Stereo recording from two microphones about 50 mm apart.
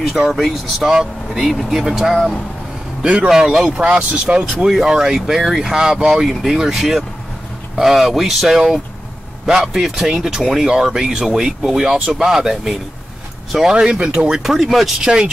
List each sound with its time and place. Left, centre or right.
0.0 s speech: centre
2.1 s speech: centre
3.3 s speech: centre
3.7 s speech: right
4.6 s speech: centre
14.4 s speech: centre
15.0 s speech: centre